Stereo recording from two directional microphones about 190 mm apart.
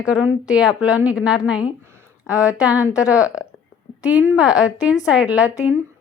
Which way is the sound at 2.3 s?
15° left (ahead or behind).